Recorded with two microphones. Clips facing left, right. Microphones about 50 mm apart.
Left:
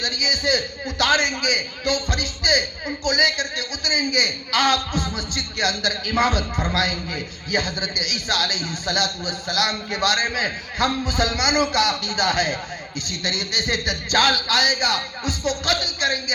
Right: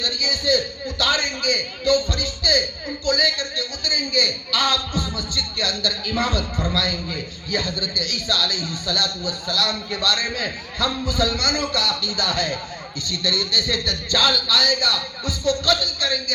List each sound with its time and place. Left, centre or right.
0.0 s a man's voice: left